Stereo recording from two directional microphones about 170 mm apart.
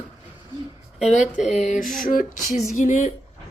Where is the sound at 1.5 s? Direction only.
45° left (ahead or behind).